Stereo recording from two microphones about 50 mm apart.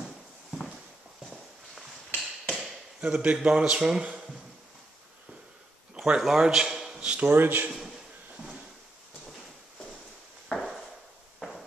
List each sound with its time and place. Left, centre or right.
2.1 s mechanisms: centre
3.0 s a man's voice: right
5.9 s a man's voice: centre
7.2 s speech: right